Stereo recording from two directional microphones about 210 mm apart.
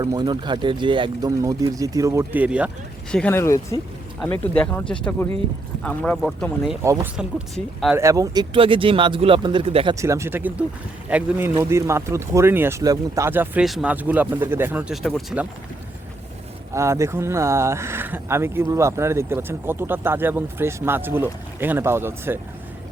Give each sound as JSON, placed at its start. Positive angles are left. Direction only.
{"t": 0.0, "sound": "speech", "side_deg": -20}
{"t": 3.1, "sound": "speech", "side_deg": 5}
{"t": 6.8, "sound": "speech", "side_deg": -15}
{"t": 7.2, "sound": "speech", "side_deg": 0}
{"t": 7.9, "sound": "speech", "side_deg": -15}
{"t": 9.9, "sound": "speech", "side_deg": -15}
{"t": 16.7, "sound": "speech", "side_deg": -15}